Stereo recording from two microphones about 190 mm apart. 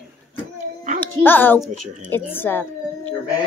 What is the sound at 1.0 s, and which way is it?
A child's voice, 10° left (ahead or behind).